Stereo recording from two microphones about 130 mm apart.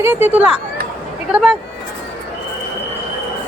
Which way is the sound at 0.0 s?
15° right (ahead or behind).